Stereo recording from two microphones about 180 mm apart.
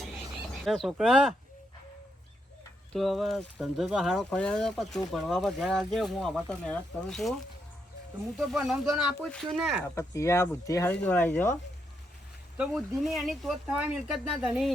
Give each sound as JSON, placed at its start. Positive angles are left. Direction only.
{"t": 0.6, "sound": "speech", "side_deg": 0}
{"t": 2.9, "sound": "speech", "side_deg": 0}
{"t": 8.4, "sound": "speech", "side_deg": 0}
{"t": 9.9, "sound": "speech", "side_deg": 15}
{"t": 12.5, "sound": "speech", "side_deg": 0}